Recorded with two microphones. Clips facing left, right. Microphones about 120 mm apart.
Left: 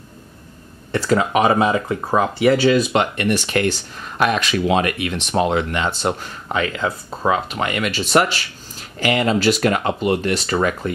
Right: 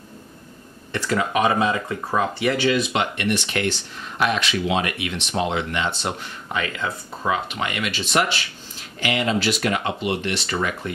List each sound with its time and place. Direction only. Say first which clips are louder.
0.9 s speech: left 5 dB; 30° left (ahead or behind)